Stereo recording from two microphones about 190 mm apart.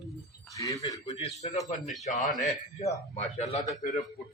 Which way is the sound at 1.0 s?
35° left (ahead or behind).